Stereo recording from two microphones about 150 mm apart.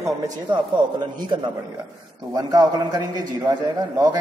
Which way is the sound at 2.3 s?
25° right (ahead or behind).